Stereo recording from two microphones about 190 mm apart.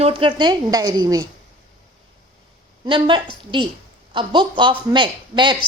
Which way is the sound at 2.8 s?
25° right (ahead or behind).